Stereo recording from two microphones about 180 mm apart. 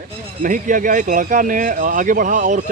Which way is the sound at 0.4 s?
50° right (ahead or behind).